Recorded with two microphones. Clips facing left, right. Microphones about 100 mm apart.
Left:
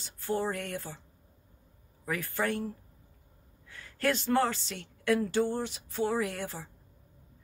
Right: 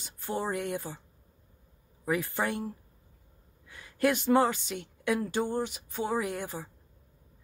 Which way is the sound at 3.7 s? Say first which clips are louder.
Right 3 dB; 15° right (ahead or behind).